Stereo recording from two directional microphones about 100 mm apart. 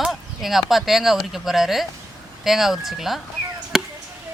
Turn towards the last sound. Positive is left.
turn(degrees=-5)  # may be behind; listen again after turning